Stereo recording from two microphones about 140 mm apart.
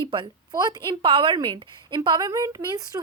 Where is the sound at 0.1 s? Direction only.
30° right (ahead or behind).